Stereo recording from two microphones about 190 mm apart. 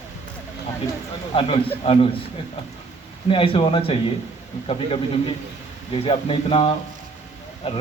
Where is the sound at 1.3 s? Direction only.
30° left (ahead or behind).